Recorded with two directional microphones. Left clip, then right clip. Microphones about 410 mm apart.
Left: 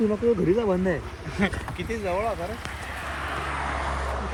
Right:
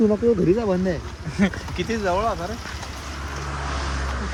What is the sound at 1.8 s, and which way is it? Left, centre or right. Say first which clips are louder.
Speech: right 5 dB; centre.